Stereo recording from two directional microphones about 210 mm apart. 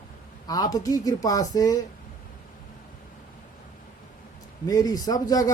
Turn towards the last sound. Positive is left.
turn(degrees=15)  # may be behind; listen again after turning